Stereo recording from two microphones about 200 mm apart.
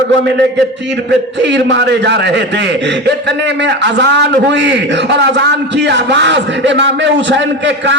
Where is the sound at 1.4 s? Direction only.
60° right (ahead or behind).